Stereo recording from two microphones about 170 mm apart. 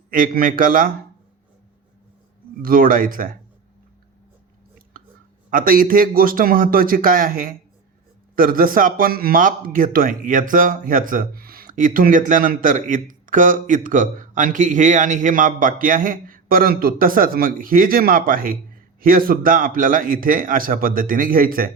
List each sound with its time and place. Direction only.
0.1 s a man's voice: 55° right (ahead or behind)
2.6 s a man's voice: 55° right (ahead or behind)
5.5 s a man's voice: 55° right (ahead or behind)